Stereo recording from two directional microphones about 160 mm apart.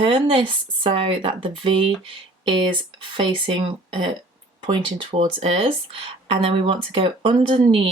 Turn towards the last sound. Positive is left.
turn(degrees=-35)  # may be behind; listen again after turning